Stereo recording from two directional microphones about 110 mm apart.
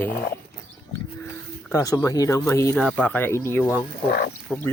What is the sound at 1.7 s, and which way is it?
Speech, 30° left (ahead or behind).